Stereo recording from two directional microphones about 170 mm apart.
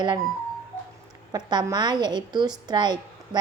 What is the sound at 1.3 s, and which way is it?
A woman's voice, 25° right (ahead or behind).